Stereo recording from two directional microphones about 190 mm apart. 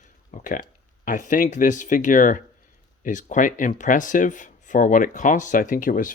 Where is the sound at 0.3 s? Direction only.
40° left (ahead or behind).